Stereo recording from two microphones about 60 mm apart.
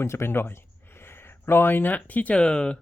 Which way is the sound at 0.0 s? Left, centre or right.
Left.